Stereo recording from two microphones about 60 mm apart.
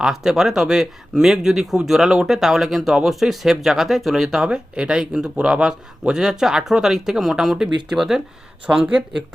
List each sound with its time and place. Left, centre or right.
0.0 s speech: centre